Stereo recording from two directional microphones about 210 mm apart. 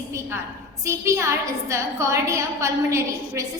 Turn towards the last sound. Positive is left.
turn(degrees=-15)  # may be behind; listen again after turning